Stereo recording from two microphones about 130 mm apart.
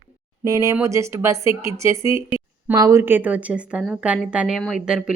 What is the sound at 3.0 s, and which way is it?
Speech, 15° right (ahead or behind).